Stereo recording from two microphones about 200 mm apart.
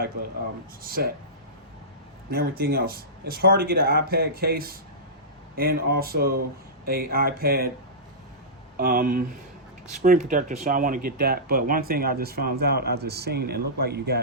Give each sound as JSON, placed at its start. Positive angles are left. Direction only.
{"t": 0.8, "sound": "speech", "side_deg": -45}
{"t": 2.3, "sound": "speech", "side_deg": -50}
{"t": 8.8, "sound": "speech", "side_deg": -45}